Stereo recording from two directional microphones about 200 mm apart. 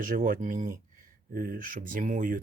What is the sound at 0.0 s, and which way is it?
Speech, 45° right (ahead or behind).